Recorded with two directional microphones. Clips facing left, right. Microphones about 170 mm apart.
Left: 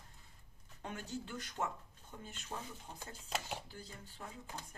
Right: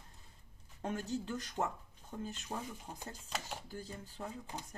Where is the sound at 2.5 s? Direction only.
30° right (ahead or behind).